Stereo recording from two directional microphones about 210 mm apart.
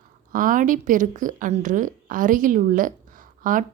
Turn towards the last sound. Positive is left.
turn(degrees=-40)  # may be behind; listen again after turning